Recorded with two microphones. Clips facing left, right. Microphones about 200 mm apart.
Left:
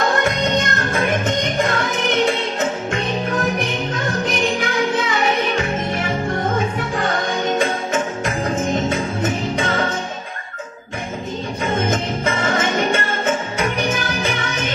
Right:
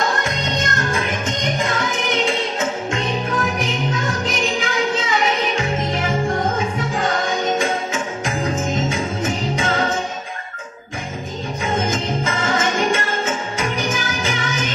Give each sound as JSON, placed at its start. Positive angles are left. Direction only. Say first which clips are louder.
{"t": 0.2, "sound": "music", "louder": "left 4 dB", "side_deg": 55}
{"t": 11.8, "sound": "music", "louder": "left 1 dB", "side_deg": 60}